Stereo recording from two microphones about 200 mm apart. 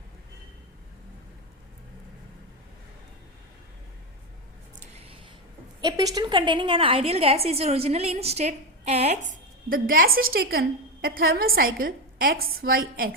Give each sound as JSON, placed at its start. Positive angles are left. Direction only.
{"t": 5.8, "sound": "a woman's voice", "side_deg": -20}
{"t": 9.6, "sound": "a woman's voice", "side_deg": -45}